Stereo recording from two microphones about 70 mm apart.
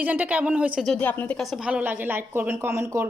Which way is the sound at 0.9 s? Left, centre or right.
Left.